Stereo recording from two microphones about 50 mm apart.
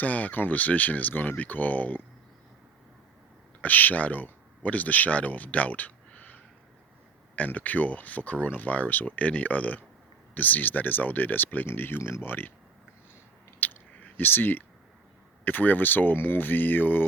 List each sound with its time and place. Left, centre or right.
0.0 s speech: left
3.6 s speech: left
13.6 s chewing: left
15.4 s speech: left